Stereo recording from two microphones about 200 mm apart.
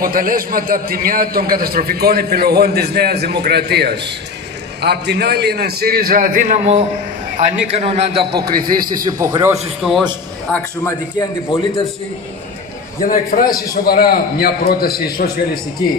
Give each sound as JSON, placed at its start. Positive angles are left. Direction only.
{"t": 0.0, "sound": "a man's voice", "side_deg": -45}
{"t": 10.5, "sound": "a man's voice", "side_deg": 10}
{"t": 11.5, "sound": "a man's voice", "side_deg": 25}
{"t": 13.0, "sound": "a man's voice", "side_deg": 45}